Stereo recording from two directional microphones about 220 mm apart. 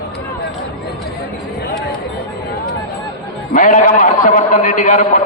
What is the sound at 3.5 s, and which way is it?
A man's voice, 35° left (ahead or behind).